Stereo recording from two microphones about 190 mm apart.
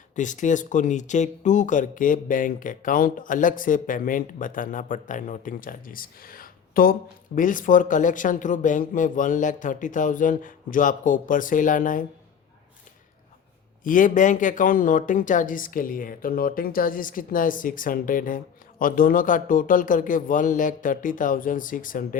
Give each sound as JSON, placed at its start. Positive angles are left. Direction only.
{"t": 0.2, "sound": "speech", "side_deg": 40}
{"t": 13.8, "sound": "speech", "side_deg": 45}